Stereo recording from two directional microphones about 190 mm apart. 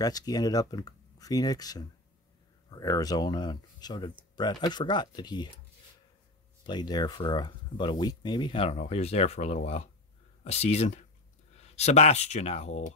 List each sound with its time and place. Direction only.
0.0 s speech: 20° left (ahead or behind)
6.6 s speech: 20° left (ahead or behind)